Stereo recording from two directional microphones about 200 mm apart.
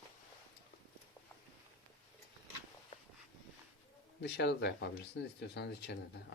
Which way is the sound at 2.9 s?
30° left (ahead or behind).